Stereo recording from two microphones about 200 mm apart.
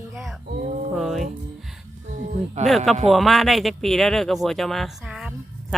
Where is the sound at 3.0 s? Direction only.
Centre (ahead or behind).